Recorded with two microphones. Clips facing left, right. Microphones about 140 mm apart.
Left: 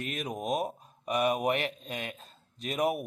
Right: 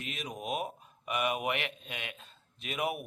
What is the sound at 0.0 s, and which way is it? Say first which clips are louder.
Speech: left 5 dB; 50° left (ahead or behind).